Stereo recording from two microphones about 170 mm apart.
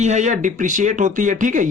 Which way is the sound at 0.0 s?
45° right (ahead or behind).